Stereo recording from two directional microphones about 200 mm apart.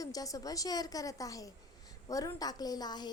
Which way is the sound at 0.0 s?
15° left (ahead or behind).